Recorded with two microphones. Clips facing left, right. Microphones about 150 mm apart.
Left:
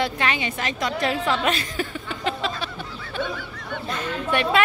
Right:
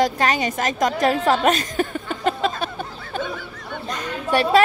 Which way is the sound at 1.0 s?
45° right (ahead or behind).